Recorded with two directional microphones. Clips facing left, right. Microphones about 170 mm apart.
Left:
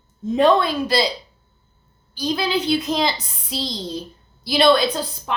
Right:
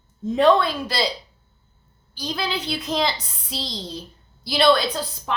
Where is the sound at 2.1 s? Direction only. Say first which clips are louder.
Left 6 dB; 15° left (ahead or behind).